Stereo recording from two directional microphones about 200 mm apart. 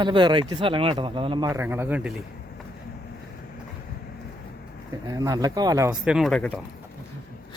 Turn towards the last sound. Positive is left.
turn(degrees=0)  # may be behind; listen again after turning